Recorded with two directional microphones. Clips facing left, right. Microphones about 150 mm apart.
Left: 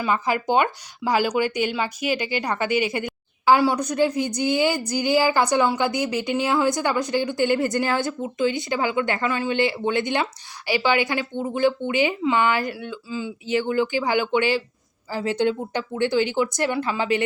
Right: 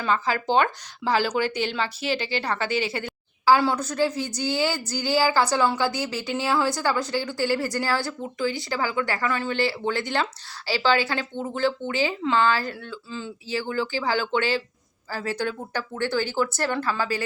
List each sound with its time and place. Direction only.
0.0 s a woman's voice: 15° left (ahead or behind)